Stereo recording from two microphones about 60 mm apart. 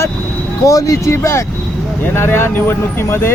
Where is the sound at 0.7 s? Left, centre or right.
Left.